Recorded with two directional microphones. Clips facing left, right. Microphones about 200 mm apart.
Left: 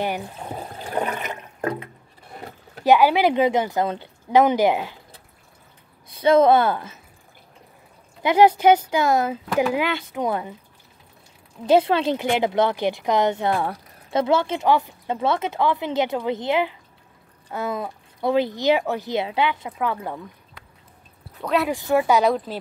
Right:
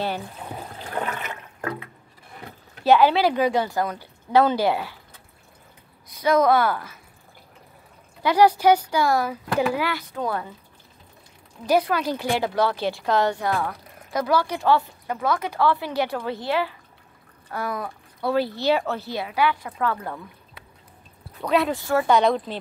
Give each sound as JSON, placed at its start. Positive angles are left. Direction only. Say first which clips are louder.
{"t": 0.0, "sound": "water", "louder": "left 2 dB", "side_deg": 20}
{"t": 2.8, "sound": "speech", "louder": "left 1 dB", "side_deg": 15}
{"t": 6.1, "sound": "speech", "louder": "left 3 dB", "side_deg": 30}
{"t": 8.2, "sound": "speech", "louder": "left 2 dB", "side_deg": 20}
{"t": 11.6, "sound": "speech", "louder": "left 4 dB", "side_deg": 25}
{"t": 21.4, "sound": "speech", "louder": "right 1 dB", "side_deg": 0}
{"t": 21.6, "sound": "speech", "louder": "left 2 dB", "side_deg": 15}